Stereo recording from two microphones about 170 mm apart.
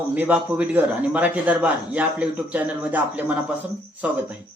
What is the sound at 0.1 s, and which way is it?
A man's voice, 10° right (ahead or behind).